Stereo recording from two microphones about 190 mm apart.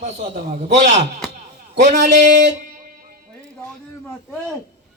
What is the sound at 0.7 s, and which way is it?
Speech, 35° right (ahead or behind).